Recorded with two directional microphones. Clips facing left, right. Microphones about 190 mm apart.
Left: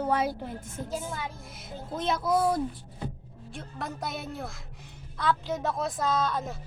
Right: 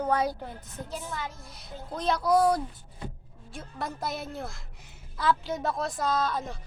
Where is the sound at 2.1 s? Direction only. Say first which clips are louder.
Right 3 dB; 25° left (ahead or behind).